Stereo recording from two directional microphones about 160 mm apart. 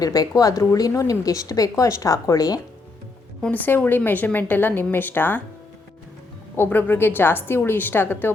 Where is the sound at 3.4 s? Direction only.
10° left (ahead or behind).